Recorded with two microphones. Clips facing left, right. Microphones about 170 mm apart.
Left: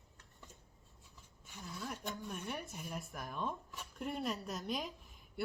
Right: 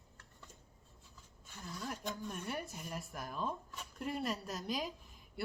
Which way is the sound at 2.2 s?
5° left (ahead or behind).